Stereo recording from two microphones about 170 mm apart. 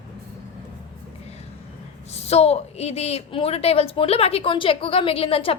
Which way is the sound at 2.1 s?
40° left (ahead or behind).